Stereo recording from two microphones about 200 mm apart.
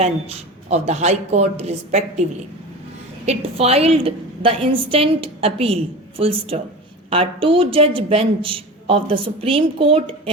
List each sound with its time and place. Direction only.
0.0 s a woman's voice: 30° right (ahead or behind)
3.2 s a woman's voice: 30° right (ahead or behind)